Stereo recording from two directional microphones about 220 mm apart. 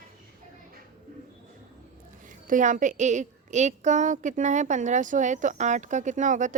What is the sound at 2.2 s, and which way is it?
A woman's voice, 35° right (ahead or behind).